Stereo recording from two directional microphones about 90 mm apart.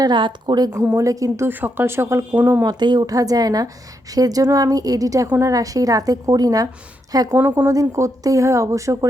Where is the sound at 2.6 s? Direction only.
50° right (ahead or behind).